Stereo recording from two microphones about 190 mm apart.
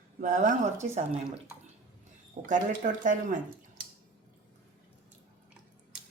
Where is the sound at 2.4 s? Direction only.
40° right (ahead or behind).